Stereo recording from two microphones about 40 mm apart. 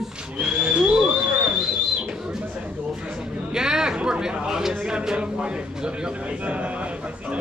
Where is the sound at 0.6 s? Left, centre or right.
Right.